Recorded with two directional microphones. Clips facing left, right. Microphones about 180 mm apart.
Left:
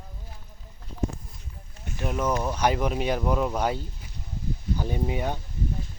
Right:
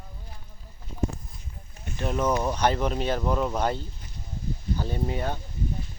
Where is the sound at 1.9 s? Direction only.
10° left (ahead or behind).